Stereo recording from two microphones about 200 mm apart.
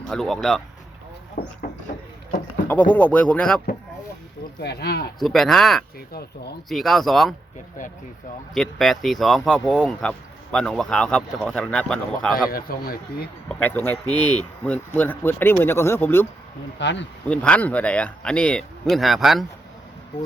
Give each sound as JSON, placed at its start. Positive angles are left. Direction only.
{"t": 0.1, "sound": "speech", "side_deg": 0}
{"t": 1.4, "sound": "speech", "side_deg": 45}
{"t": 2.9, "sound": "speech", "side_deg": 10}
{"t": 4.6, "sound": "speech", "side_deg": 55}
{"t": 5.2, "sound": "speech", "side_deg": 0}
{"t": 8.5, "sound": "speech", "side_deg": 0}
{"t": 12.5, "sound": "speech", "side_deg": 45}
{"t": 13.5, "sound": "speech", "side_deg": 10}
{"t": 16.7, "sound": "speech", "side_deg": 65}
{"t": 17.2, "sound": "speech", "side_deg": 5}